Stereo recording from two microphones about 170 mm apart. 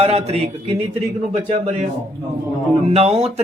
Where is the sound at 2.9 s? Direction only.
35° right (ahead or behind).